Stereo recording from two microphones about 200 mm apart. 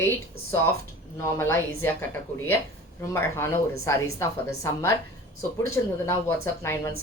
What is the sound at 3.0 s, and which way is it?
Speech, 15° left (ahead or behind).